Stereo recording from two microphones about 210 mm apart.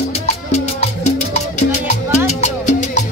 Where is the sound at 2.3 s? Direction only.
35° left (ahead or behind).